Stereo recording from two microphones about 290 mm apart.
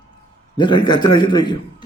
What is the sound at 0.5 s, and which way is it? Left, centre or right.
A man's voice, centre.